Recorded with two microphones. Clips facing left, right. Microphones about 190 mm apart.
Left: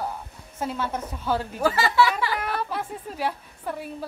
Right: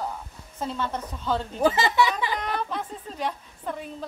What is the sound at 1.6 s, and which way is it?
Speech, 20° right (ahead or behind).